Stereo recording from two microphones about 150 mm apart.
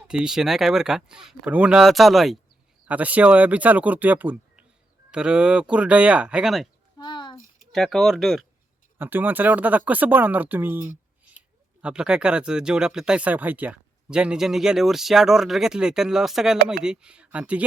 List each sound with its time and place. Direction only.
0.1 s speech: 5° right (ahead or behind)
7.0 s a sound: 30° left (ahead or behind)
7.7 s speech: centre (ahead or behind)
9.0 s speech: 15° right (ahead or behind)